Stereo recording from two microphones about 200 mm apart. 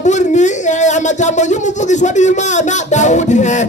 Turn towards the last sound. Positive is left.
turn(degrees=35)  # may be behind; listen again after turning